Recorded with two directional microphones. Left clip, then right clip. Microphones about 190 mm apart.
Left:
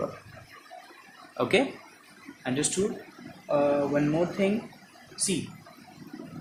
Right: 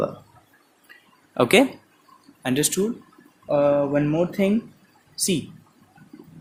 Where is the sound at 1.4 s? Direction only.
55° right (ahead or behind).